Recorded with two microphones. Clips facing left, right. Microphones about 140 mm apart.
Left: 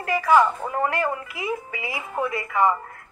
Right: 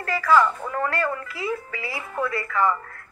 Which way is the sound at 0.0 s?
20° left (ahead or behind).